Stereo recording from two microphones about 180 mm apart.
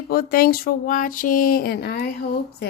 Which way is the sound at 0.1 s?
55° left (ahead or behind).